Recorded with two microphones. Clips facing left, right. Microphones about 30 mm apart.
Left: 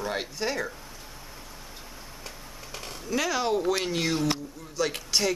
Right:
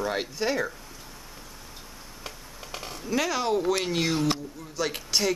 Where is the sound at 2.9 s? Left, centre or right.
Centre.